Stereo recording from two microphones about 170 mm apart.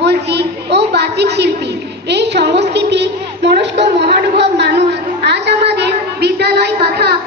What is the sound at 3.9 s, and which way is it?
A child's voice, 75° right (ahead or behind).